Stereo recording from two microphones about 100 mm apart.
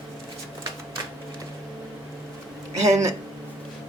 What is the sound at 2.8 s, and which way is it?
Speech, 35° right (ahead or behind).